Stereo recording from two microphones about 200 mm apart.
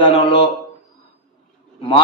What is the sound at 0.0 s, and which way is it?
Speech, 30° left (ahead or behind).